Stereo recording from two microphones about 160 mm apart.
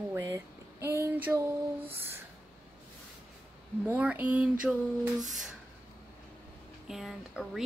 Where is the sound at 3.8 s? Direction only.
10° right (ahead or behind).